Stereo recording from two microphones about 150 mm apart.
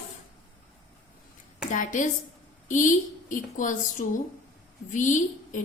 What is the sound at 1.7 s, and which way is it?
A woman's voice, 55° left (ahead or behind).